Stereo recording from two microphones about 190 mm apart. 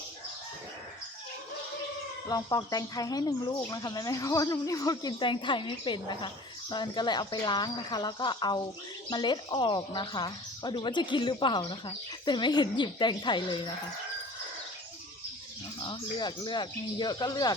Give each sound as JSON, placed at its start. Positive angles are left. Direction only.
{"t": 2.2, "sound": "speech", "side_deg": 20}
{"t": 15.8, "sound": "speech", "side_deg": 25}